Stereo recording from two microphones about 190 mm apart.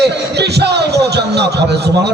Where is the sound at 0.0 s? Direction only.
60° right (ahead or behind).